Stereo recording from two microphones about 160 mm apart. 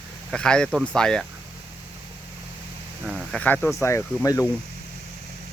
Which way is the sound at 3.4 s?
10° left (ahead or behind).